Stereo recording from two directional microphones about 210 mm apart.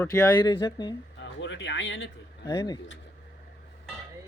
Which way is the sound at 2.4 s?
20° left (ahead or behind).